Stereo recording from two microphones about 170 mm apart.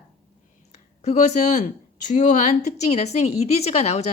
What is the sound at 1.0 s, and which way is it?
A woman's voice, 40° left (ahead or behind).